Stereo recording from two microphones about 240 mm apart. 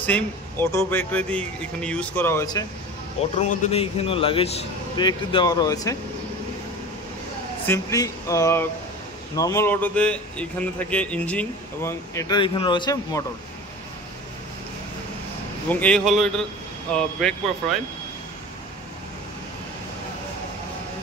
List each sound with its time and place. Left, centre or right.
0.0 s a man's voice: centre
3.3 s a man's voice: left
7.6 s a man's voice: centre
15.7 s speech: centre